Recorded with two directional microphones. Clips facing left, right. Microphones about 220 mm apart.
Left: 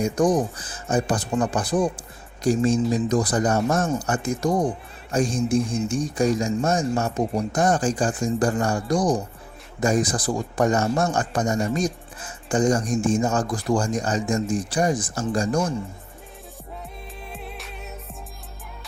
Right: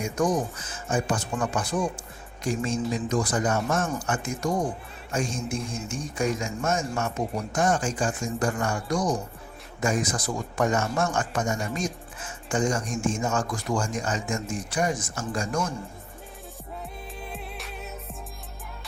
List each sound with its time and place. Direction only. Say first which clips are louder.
0.0 s a man's voice: left 5 dB; 35° left (ahead or behind)
17.3 s music: left 1 dB; centre (ahead or behind)